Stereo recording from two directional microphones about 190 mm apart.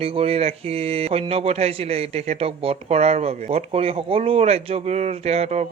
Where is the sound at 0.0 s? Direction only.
30° right (ahead or behind).